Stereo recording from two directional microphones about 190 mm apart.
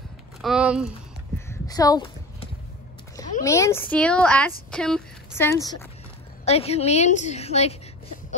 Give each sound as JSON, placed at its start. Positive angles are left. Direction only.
{"t": 0.4, "sound": "speech", "side_deg": -5}
{"t": 1.5, "sound": "a sound", "side_deg": 20}
{"t": 3.4, "sound": "a woman's voice", "side_deg": 15}
{"t": 5.5, "sound": "a woman's voice", "side_deg": 15}
{"t": 6.4, "sound": "a woman's voice", "side_deg": 35}